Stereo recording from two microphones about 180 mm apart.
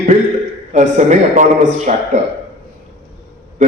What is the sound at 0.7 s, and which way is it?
A man's voice, 40° right (ahead or behind).